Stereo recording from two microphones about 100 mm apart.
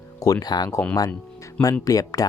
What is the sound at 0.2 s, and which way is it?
Speech, 35° left (ahead or behind).